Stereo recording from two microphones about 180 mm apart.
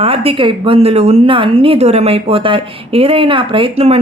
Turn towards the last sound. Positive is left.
turn(degrees=-35)  # may be behind; listen again after turning